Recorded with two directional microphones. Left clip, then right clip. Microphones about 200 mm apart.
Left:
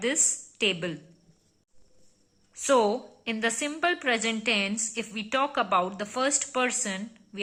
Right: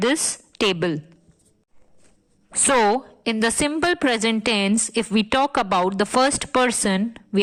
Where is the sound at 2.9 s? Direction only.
45° right (ahead or behind).